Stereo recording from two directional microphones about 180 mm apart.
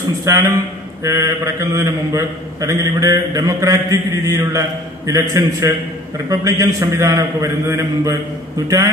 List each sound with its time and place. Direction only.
0.2 s a man's voice: 20° right (ahead or behind)